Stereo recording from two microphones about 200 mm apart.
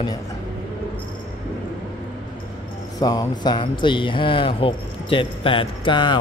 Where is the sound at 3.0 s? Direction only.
20° left (ahead or behind).